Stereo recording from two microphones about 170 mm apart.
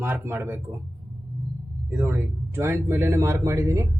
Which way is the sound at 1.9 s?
10° right (ahead or behind).